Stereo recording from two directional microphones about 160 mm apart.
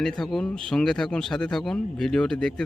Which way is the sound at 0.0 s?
Centre (ahead or behind).